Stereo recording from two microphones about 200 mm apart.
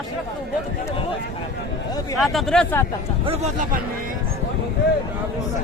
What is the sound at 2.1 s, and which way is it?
Speech, centre (ahead or behind).